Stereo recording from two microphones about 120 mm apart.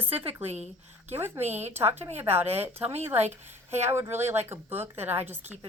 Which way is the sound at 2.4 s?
60° right (ahead or behind).